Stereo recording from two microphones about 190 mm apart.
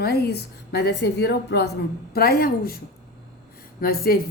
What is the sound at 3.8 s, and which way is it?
Speech, 50° left (ahead or behind).